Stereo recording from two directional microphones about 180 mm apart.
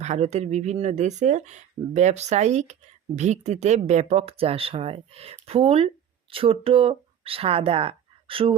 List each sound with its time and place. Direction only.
0.0 s speech: 40° right (ahead or behind)